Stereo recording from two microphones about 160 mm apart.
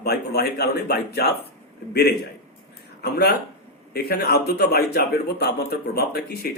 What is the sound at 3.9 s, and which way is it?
Speech, 80° left.